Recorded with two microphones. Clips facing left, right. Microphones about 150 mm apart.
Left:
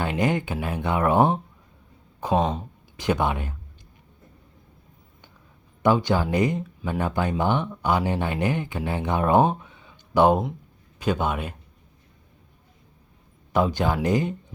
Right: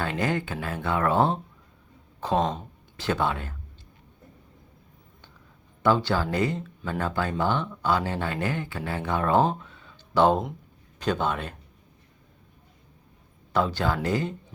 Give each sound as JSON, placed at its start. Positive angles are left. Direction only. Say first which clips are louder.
{"t": 0.0, "sound": "speech", "louder": "left 3 dB", "side_deg": 15}
{"t": 2.2, "sound": "speech", "louder": "left 2 dB", "side_deg": 5}
{"t": 3.0, "sound": "speech", "louder": "left 2 dB", "side_deg": 15}
{"t": 5.8, "sound": "a man's voice", "louder": "left 2 dB", "side_deg": 15}
{"t": 13.5, "sound": "speech", "louder": "left 3 dB", "side_deg": 15}